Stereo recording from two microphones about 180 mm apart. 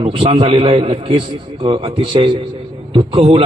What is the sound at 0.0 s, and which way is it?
A man's voice, 30° right (ahead or behind).